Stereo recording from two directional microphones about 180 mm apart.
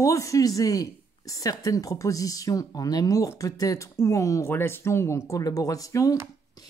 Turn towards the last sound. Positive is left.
turn(degrees=20)  # may be behind; listen again after turning